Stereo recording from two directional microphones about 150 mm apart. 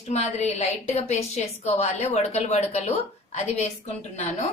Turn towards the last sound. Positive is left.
turn(degrees=50)  # may be behind; listen again after turning